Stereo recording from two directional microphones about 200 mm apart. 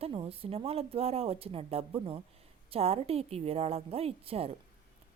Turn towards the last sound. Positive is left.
turn(degrees=-30)  # may be behind; listen again after turning